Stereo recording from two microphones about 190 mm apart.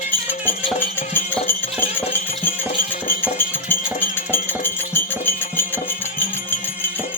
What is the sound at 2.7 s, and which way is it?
Music, 45° left (ahead or behind).